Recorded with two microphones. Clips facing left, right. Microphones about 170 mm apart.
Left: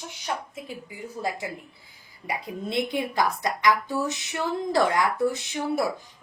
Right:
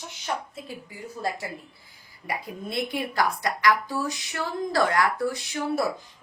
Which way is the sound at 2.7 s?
20° left (ahead or behind).